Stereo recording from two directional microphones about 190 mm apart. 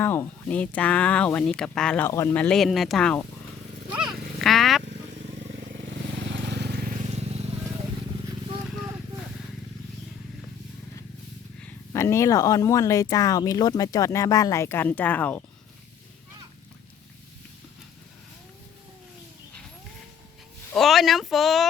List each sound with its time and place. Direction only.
0.0 s speech: 10° left (ahead or behind)
3.9 s a sound: centre (ahead or behind)
5.7 s vehicle: 70° right (ahead or behind); by 6.9 s 55° right (ahead or behind)
11.6 s speech: 15° left (ahead or behind)
20.7 s speech: centre (ahead or behind)